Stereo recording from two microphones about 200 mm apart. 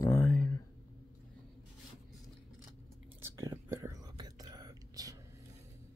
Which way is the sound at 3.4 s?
15° right (ahead or behind).